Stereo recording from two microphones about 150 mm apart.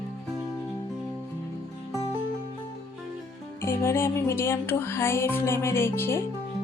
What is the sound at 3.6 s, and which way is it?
Music, 15° left (ahead or behind).